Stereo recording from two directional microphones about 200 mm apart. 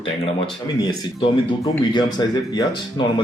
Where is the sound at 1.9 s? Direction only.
20° left (ahead or behind).